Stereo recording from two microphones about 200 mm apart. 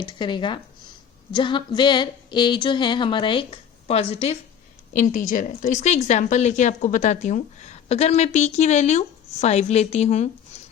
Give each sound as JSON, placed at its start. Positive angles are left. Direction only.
{"t": 0.0, "sound": "a woman's voice", "side_deg": 20}